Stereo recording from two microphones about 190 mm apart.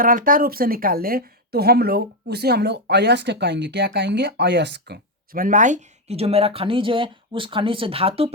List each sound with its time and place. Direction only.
0.0 s a woman's voice: 45° right (ahead or behind); by 8.3 s 30° right (ahead or behind)